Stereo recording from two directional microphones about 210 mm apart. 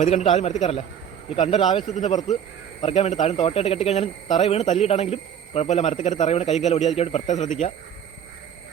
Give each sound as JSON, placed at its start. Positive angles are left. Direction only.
{"t": 0.0, "sound": "speech", "side_deg": 30}